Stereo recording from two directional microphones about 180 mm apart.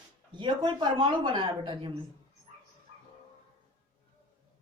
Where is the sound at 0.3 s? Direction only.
25° right (ahead or behind).